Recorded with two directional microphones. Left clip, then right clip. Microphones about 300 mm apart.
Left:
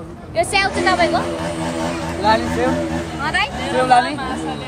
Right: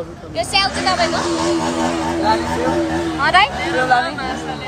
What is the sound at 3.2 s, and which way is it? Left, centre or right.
Speech, right.